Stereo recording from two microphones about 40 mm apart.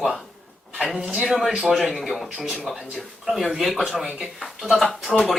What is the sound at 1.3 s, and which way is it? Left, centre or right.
Speech, centre.